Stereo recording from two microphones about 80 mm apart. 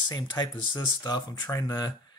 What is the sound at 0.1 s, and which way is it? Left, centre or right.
Speech, left.